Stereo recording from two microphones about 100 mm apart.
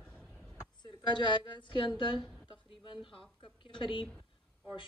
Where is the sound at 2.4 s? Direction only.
55° left (ahead or behind).